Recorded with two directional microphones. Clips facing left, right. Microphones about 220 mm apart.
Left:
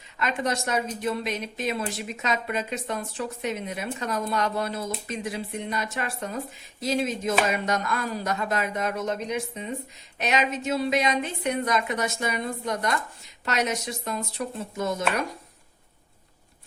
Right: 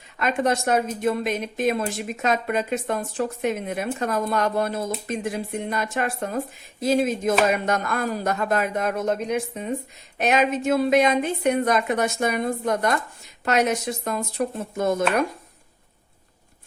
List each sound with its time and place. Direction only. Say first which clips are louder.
0.2 s speech: right 5 dB; 50° right (ahead or behind)